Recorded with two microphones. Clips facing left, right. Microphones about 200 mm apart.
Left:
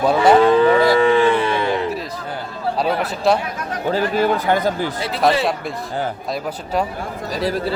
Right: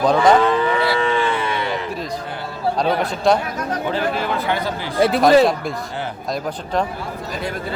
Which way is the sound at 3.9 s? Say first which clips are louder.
Left 7 dB; 45° left (ahead or behind).